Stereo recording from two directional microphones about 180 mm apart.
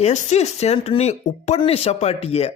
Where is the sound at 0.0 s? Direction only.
40° left (ahead or behind).